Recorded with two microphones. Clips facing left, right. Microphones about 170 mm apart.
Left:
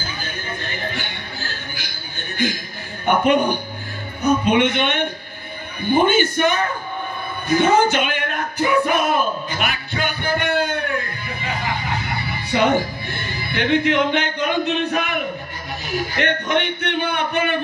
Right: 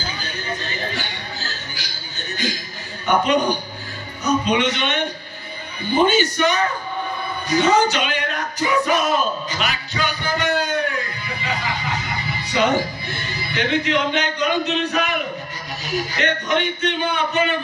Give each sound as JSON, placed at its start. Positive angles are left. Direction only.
{"t": 0.0, "sound": "music", "side_deg": 50}
{"t": 3.1, "sound": "speech", "side_deg": 55}
{"t": 7.4, "sound": "music", "side_deg": 55}
{"t": 15.8, "sound": "speech", "side_deg": 55}